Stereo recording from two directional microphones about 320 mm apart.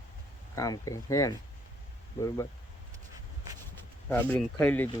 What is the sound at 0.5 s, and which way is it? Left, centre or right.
Speech, centre.